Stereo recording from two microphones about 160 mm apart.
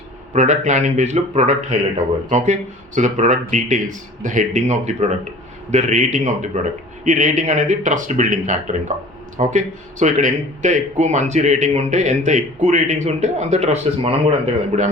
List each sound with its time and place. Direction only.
0.3 s a man's voice: 50° right (ahead or behind)